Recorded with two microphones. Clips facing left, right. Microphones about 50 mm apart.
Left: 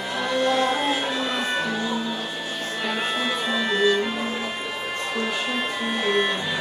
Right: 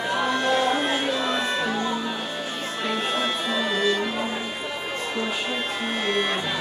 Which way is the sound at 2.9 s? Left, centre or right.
Centre.